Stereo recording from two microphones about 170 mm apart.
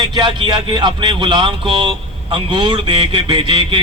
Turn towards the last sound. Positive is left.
turn(degrees=-30)  # may be behind; listen again after turning